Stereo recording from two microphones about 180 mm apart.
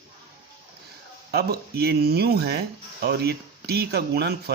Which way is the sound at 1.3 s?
60° right (ahead or behind).